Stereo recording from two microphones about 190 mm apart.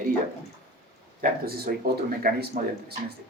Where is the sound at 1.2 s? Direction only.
55° right (ahead or behind).